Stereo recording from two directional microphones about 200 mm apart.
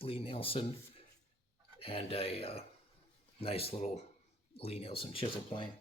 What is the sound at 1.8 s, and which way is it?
Speech, 30° left (ahead or behind).